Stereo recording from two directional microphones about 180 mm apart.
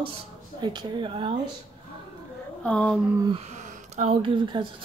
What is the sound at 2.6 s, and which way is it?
Speech, 5° left (ahead or behind).